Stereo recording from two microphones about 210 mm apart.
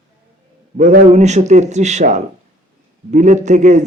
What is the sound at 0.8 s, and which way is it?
A man's voice, 35° right (ahead or behind).